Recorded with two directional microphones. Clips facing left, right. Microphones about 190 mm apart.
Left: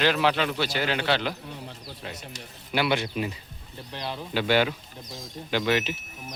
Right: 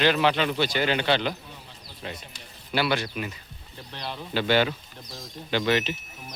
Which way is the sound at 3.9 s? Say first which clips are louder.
Left 1 dB; 10° left (ahead or behind).